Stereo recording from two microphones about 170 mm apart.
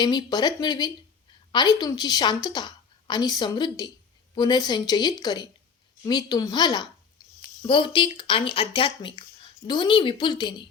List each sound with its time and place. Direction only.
0.0 s speech: 25° left (ahead or behind)